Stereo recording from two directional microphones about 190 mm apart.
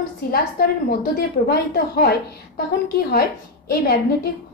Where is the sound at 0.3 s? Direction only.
50° left (ahead or behind).